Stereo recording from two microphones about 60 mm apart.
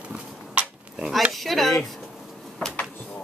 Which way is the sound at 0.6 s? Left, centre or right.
Centre.